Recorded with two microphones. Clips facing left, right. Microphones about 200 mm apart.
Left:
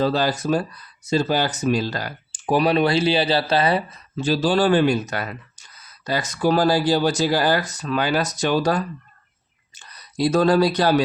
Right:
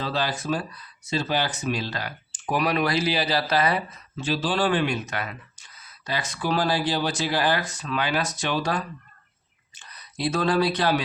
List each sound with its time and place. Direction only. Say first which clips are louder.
0.0 s speech: left 7 dB; 40° left (ahead or behind)